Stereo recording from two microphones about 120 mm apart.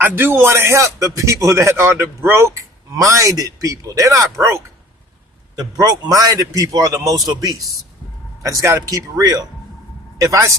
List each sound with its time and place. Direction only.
0.0 s a man's voice: 20° right (ahead or behind)
5.7 s a man's voice: 30° right (ahead or behind)
8.6 s a man's voice: 25° right (ahead or behind)